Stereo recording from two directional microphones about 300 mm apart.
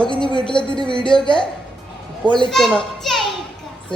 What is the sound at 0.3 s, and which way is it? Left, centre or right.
Speech, centre.